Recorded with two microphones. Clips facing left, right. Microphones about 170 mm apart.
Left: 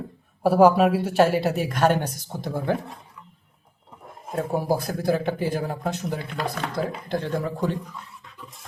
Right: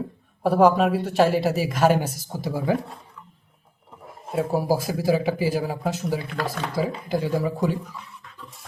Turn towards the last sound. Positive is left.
turn(degrees=-5)  # may be behind; listen again after turning